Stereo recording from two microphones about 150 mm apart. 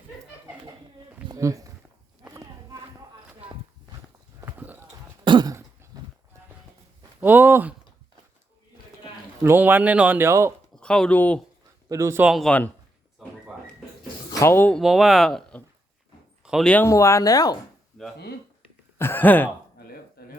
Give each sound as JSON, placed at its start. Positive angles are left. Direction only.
{"t": 1.3, "sound": "a sound", "side_deg": -20}
{"t": 4.4, "sound": "clip-clop", "side_deg": -15}
{"t": 5.2, "sound": "throat clearing", "side_deg": -30}
{"t": 5.5, "sound": "throat clearing", "side_deg": -20}
{"t": 7.2, "sound": "a sound", "side_deg": -10}
{"t": 9.4, "sound": "speech", "side_deg": -15}
{"t": 10.8, "sound": "speech", "side_deg": 5}
{"t": 11.9, "sound": "a man's voice", "side_deg": -20}
{"t": 12.2, "sound": "speech", "side_deg": 0}
{"t": 14.3, "sound": "speech", "side_deg": 20}
{"t": 14.8, "sound": "speech", "side_deg": 0}
{"t": 16.4, "sound": "a sound", "side_deg": -5}
{"t": 16.6, "sound": "speech", "side_deg": 15}
{"t": 18.9, "sound": "a sound", "side_deg": 15}